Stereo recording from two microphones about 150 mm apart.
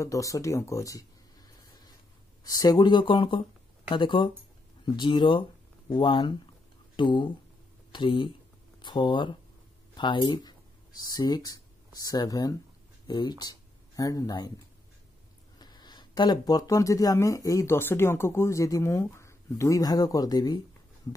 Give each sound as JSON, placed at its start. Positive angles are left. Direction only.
{"t": 0.0, "sound": "speech", "side_deg": 20}
{"t": 2.4, "sound": "speech", "side_deg": 25}
{"t": 15.6, "sound": "speech", "side_deg": 30}